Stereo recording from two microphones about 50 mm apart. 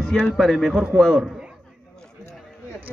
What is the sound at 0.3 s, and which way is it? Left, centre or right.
Speech, centre.